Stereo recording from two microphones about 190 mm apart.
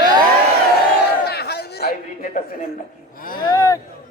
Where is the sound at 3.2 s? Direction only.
50° left (ahead or behind).